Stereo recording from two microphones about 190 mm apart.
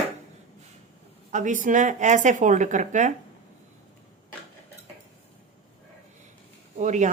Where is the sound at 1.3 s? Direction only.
40° right (ahead or behind).